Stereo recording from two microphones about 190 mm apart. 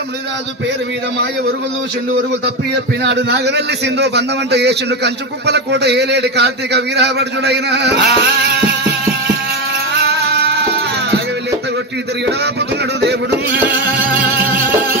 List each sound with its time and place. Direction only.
3.0 s a man's voice: 65° right (ahead or behind)
10.0 s music: 60° right (ahead or behind)
13.0 s a man's voice: 60° right (ahead or behind)